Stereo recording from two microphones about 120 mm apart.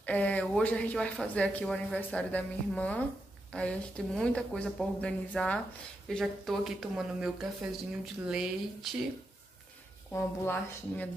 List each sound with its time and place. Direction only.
0.0 s speech: 15° left (ahead or behind); by 8.9 s 5° right (ahead or behind)
10.1 s speech: 15° left (ahead or behind)